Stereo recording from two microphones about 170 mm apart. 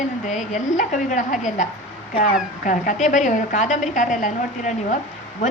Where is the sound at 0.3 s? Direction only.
45° left (ahead or behind).